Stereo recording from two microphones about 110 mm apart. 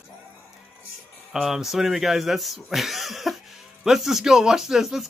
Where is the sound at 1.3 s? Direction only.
5° right (ahead or behind).